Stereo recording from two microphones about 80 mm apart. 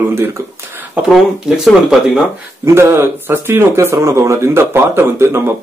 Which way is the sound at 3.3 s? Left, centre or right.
Right.